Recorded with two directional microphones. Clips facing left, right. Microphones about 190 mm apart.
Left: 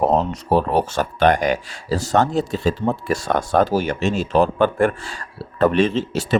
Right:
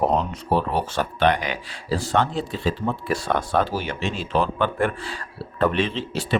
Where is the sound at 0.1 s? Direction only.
45° left (ahead or behind).